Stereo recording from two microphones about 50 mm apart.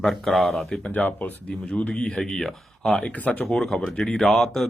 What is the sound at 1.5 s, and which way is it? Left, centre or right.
Speech, left.